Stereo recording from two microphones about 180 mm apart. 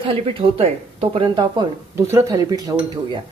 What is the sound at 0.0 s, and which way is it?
Speech, 30° right (ahead or behind).